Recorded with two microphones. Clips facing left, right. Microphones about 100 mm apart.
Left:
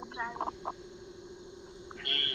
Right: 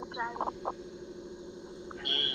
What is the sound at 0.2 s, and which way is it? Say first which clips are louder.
Speech: right 2 dB; 15° right (ahead or behind).